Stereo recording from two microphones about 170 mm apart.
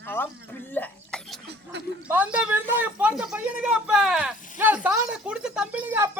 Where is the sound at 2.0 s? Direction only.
10° right (ahead or behind).